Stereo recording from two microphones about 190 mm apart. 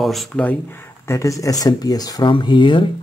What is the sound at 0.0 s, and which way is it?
Speech, centre (ahead or behind).